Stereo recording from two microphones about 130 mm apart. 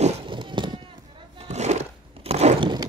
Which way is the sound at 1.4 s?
60° right (ahead or behind).